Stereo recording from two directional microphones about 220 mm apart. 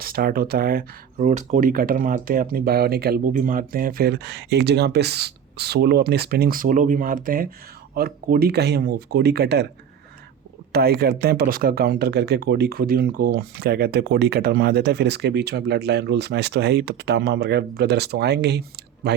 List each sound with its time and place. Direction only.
0.0 s speech: 40° right (ahead or behind)
10.7 s speech: 45° right (ahead or behind)